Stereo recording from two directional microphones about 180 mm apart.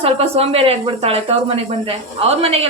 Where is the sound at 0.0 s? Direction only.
35° right (ahead or behind).